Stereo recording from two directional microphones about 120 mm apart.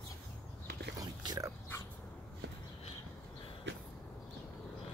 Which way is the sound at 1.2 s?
35° right (ahead or behind).